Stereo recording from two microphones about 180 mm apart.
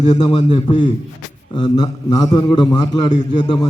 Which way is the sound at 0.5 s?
25° left (ahead or behind).